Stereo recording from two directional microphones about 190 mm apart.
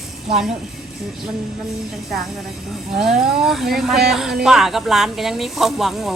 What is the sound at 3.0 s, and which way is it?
Speech, centre (ahead or behind).